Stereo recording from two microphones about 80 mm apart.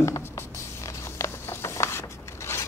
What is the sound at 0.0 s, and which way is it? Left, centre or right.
Writing, left.